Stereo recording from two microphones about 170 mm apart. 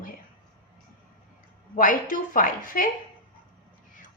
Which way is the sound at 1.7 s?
55° left (ahead or behind).